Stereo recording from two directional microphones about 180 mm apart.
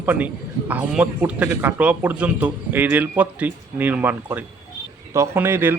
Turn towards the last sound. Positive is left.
turn(degrees=-15)  # may be behind; listen again after turning